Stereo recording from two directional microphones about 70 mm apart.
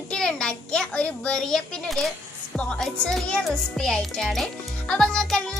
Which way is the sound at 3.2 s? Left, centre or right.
Centre.